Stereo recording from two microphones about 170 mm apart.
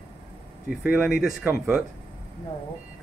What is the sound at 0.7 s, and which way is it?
Speech, 5° right (ahead or behind).